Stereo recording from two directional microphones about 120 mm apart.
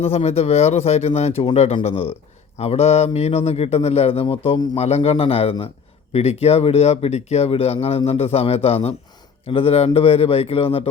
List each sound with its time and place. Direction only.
0.0 s a man's voice: 60° left (ahead or behind)